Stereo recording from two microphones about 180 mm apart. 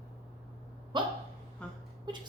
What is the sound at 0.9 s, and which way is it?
Speech, 25° right (ahead or behind).